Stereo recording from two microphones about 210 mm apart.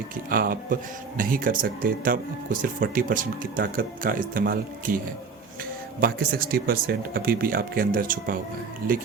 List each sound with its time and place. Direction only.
0.3 s speech: 45° right (ahead or behind)
6.0 s speech: 45° right (ahead or behind)